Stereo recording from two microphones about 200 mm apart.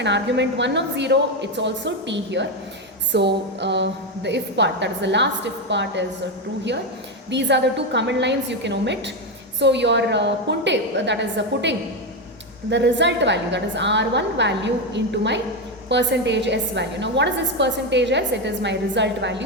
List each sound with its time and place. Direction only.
0.0 s a woman's voice: 60° right (ahead or behind)
7.3 s a woman's voice: 60° right (ahead or behind)